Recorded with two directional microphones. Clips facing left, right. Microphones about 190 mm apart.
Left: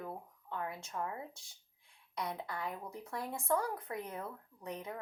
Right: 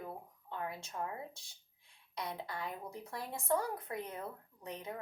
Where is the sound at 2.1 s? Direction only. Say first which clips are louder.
Left 2 dB; 30° right (ahead or behind).